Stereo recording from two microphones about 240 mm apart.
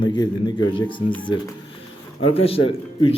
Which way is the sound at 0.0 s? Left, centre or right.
Centre.